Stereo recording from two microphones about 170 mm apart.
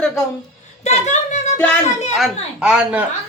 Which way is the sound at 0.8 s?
45° left (ahead or behind).